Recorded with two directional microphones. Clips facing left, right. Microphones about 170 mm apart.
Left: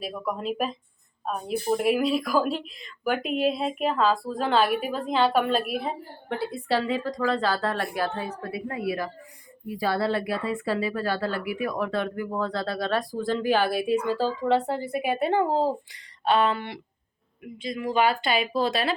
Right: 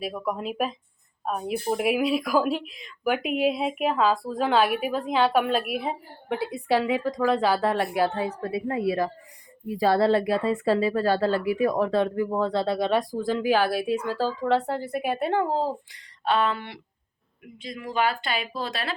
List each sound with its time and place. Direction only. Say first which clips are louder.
0.0 s speech: right 1 dB; 5° right (ahead or behind)
8.3 s a woman's voice: right 4 dB; 35° right (ahead or behind)
9.8 s speech: right 5 dB; 35° right (ahead or behind); by 18.9 s 5° left (ahead or behind)